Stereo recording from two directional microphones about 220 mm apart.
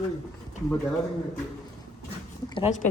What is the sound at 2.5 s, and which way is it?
Speech, 30° left (ahead or behind).